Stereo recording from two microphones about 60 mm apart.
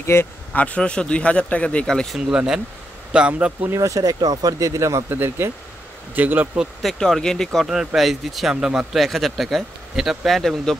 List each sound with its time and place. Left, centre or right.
0.0 s speech: left
0.5 s a man's voice: left
2.1 s speech: centre
3.7 s speech: right
5.1 s speech: right
6.8 s speech: centre
7.6 s speech: centre
9.0 s speech: centre